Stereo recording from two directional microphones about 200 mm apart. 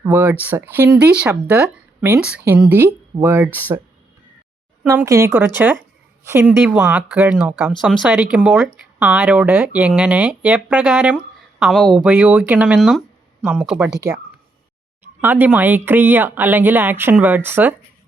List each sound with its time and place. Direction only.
0.0 s speech: 10° right (ahead or behind)
4.9 s speech: 15° right (ahead or behind)
15.2 s speech: 10° right (ahead or behind)